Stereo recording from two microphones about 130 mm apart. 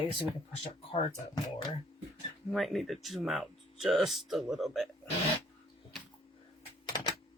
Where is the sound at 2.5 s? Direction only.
Centre (ahead or behind).